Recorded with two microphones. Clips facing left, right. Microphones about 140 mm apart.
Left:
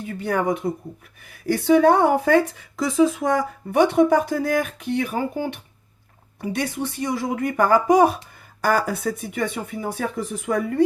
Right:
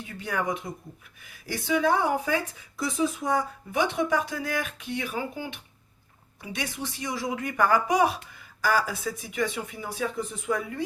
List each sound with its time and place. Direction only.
0.0 s speech: 45° left (ahead or behind); by 3.8 s 80° left
3.8 s speech: 50° left (ahead or behind)